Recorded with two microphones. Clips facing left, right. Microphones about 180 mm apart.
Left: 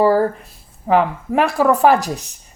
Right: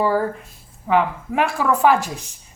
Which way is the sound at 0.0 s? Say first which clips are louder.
Left 5 dB; 40° left (ahead or behind).